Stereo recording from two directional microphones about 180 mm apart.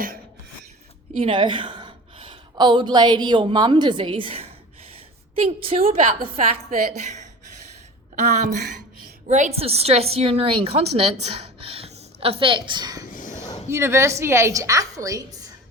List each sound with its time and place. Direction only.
1.2 s a woman's voice: 25° right (ahead or behind)
5.9 s a woman's voice: 40° right (ahead or behind); by 13.1 s 20° right (ahead or behind)
13.1 s a sound: 45° left (ahead or behind)
13.7 s a woman's voice: 15° right (ahead or behind)